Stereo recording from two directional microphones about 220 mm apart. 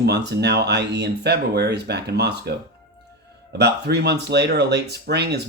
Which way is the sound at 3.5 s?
50° right (ahead or behind).